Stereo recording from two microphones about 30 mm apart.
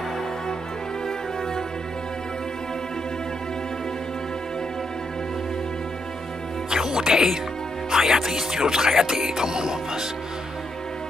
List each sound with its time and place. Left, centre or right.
6.7 s music: centre
7.9 s speech: centre